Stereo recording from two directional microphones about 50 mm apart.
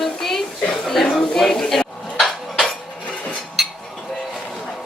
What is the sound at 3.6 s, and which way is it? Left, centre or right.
Cutlery, centre.